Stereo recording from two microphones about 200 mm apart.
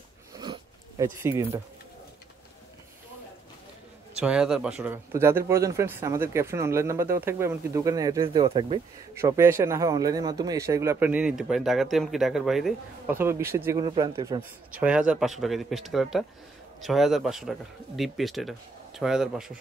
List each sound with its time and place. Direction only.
0.4 s a sound: 20° right (ahead or behind)
4.2 s a man's voice: 5° right (ahead or behind); by 8.8 s 25° right (ahead or behind)
9.1 s a man's voice: 10° right (ahead or behind)
14.8 s speech: 5° right (ahead or behind)